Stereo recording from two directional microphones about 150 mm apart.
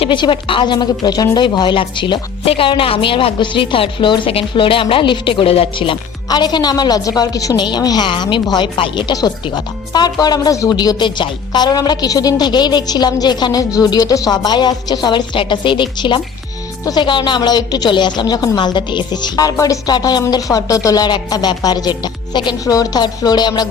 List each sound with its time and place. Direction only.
0.0 s a woman's voice: 35° left (ahead or behind)